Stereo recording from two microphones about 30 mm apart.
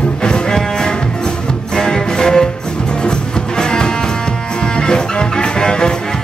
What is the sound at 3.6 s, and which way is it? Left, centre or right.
Music, left.